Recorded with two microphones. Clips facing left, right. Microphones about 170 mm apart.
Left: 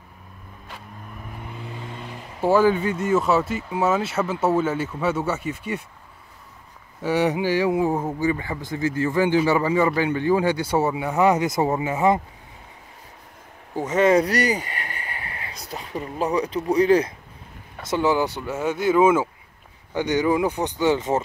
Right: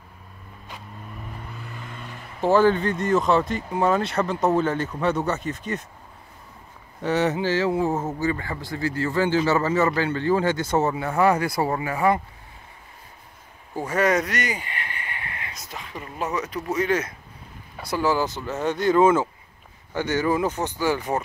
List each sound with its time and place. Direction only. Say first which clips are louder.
1.3 s vehicle: left 3 dB; 15° left (ahead or behind)
2.4 s speech: even; 10° left (ahead or behind)
7.0 s speech: left 1 dB; 10° left (ahead or behind)
13.7 s a sound: left 4 dB; 20° left (ahead or behind)
15.7 s speech: left 7 dB; 35° left (ahead or behind)
17.8 s speech: left 2 dB; 20° left (ahead or behind)